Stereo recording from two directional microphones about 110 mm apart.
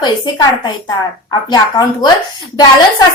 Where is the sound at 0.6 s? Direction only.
40° left (ahead or behind).